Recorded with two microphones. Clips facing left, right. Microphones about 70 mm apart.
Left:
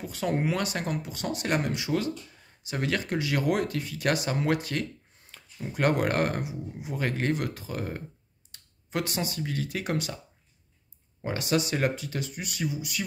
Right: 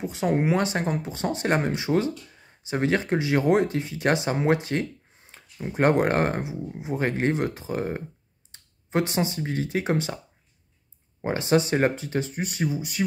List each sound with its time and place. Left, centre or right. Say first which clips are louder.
0.0 s speech: right 4 dB; right
8.5 s a sound: right 5 dB; right
9.4 s speech: right 5 dB; right